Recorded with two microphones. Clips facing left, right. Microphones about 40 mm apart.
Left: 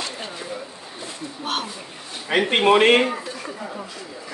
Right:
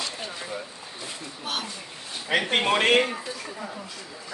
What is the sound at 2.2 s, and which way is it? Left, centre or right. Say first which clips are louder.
Speech: left 6 dB; centre.